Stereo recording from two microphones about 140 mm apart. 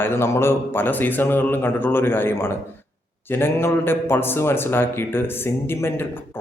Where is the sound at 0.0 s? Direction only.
20° left (ahead or behind).